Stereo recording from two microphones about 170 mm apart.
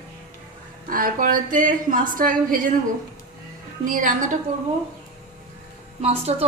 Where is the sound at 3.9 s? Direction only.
50° right (ahead or behind).